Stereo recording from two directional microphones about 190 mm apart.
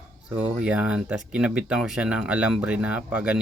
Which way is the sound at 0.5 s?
5° right (ahead or behind).